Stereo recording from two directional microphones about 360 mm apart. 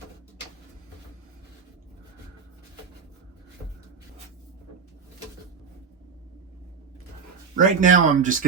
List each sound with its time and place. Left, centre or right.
7.5 s speech: right